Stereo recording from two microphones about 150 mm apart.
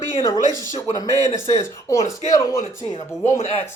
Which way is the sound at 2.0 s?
55° left (ahead or behind).